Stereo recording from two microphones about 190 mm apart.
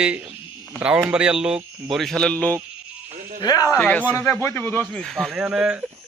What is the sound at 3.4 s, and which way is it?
Speech, 20° left (ahead or behind).